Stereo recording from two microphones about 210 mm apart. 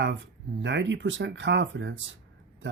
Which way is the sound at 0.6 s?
60° right (ahead or behind).